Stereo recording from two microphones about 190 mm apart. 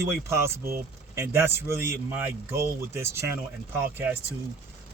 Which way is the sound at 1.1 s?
10° right (ahead or behind).